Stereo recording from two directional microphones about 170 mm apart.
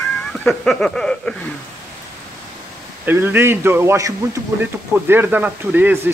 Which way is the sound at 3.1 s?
10° right (ahead or behind).